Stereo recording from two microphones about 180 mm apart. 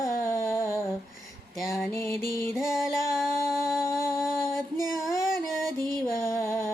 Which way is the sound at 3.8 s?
15° left (ahead or behind).